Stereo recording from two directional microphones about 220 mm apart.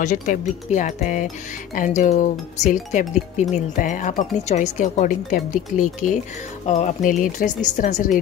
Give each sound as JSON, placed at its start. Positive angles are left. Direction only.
{"t": 0.0, "sound": "speech", "side_deg": 35}